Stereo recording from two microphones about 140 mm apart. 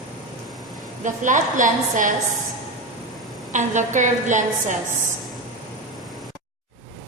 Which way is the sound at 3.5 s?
60° right (ahead or behind).